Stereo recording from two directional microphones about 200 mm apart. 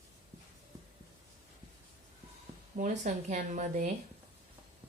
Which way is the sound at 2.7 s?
40° right (ahead or behind).